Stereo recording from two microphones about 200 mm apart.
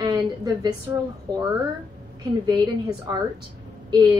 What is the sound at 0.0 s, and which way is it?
Speech, 20° right (ahead or behind).